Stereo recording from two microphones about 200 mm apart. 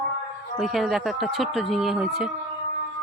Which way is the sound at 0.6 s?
Centre (ahead or behind).